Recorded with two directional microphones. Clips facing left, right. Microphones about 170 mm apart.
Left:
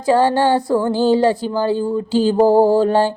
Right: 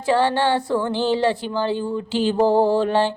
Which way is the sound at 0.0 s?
40° left (ahead or behind).